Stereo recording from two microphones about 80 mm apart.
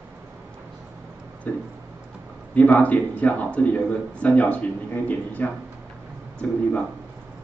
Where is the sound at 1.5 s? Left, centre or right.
Left.